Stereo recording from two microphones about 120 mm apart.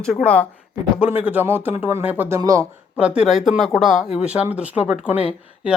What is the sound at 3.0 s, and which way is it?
Speech, 10° right (ahead or behind).